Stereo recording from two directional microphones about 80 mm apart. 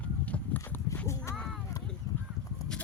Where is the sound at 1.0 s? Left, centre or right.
Left.